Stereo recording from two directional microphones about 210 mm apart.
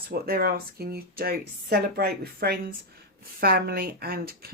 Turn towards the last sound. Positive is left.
turn(degrees=-45)  # may be behind; listen again after turning